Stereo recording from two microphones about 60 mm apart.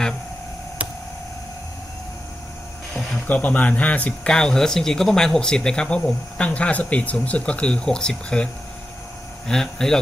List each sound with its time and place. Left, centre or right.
0.8 s a sound: right
3.2 s speech: left
9.5 s speech: centre